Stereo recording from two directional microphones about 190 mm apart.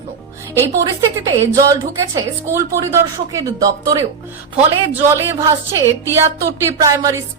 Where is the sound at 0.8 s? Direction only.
15° right (ahead or behind).